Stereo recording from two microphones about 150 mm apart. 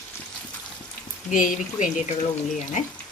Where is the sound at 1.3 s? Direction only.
60° left (ahead or behind).